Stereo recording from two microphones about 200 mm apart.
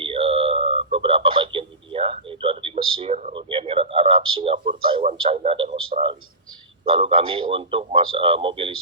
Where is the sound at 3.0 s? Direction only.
35° right (ahead or behind).